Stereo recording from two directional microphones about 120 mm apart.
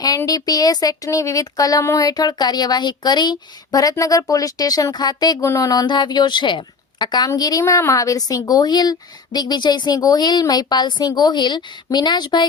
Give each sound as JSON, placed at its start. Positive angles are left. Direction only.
{"t": 0.3, "sound": "speech", "side_deg": 30}